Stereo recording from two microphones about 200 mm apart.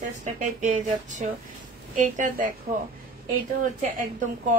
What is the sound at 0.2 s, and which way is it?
Speech, 40° right (ahead or behind).